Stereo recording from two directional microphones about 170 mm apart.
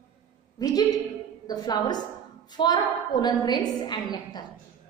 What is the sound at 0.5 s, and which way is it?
A woman's voice, 20° left (ahead or behind).